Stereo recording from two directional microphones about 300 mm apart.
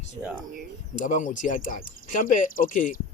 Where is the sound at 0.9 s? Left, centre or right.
Left.